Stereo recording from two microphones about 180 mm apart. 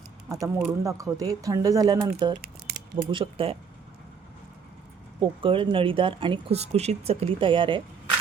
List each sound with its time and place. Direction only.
0.3 s speech: 15° right (ahead or behind)
5.2 s speech: 30° right (ahead or behind)